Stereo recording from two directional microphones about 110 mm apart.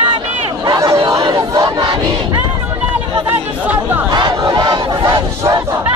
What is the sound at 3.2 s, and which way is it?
Chatter, 15° right (ahead or behind).